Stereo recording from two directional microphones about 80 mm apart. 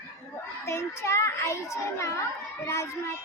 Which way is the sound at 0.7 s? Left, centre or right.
Left.